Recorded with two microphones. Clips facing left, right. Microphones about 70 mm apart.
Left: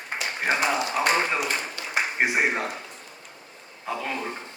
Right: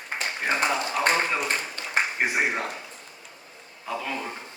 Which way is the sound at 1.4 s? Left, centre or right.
Right.